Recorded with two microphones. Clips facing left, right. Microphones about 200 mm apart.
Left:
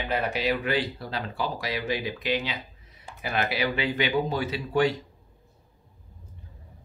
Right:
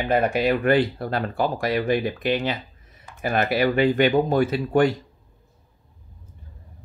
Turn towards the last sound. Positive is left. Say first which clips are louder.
# right 5 dB
turn(degrees=-50)  # may be behind; listen again after turning